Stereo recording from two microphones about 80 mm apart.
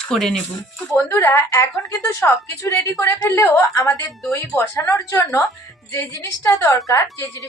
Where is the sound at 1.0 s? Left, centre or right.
Left.